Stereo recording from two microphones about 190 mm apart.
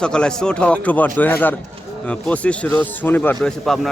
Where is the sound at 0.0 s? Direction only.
5° left (ahead or behind).